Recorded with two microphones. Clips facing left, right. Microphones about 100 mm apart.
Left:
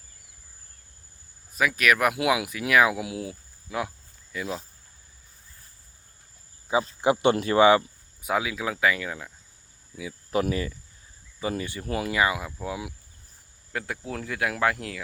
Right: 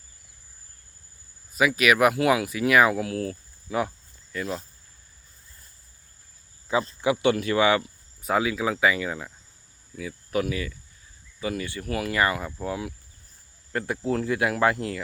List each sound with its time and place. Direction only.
1.5 s speech: 5° right (ahead or behind)
2.9 s speech: 10° left (ahead or behind)
3.7 s cricket: centre (ahead or behind)
6.7 s speech: 15° left (ahead or behind)
8.2 s speech: centre (ahead or behind)
9.9 s speech: 10° left (ahead or behind)
10.4 s speech: 35° left (ahead or behind)
12.1 s speech: 10° left (ahead or behind)